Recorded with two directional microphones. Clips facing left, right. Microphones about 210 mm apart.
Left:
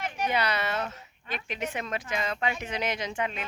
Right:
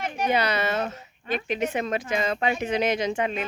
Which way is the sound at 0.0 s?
25° right (ahead or behind).